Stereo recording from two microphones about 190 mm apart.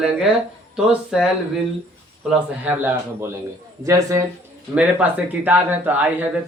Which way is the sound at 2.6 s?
10° right (ahead or behind).